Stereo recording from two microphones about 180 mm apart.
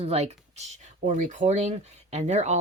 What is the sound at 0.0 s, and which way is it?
Speech, 35° right (ahead or behind).